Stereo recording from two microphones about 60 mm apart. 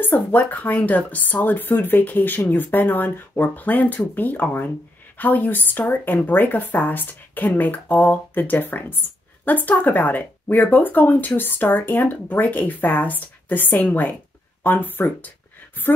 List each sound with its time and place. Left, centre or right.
0.0 s speech: left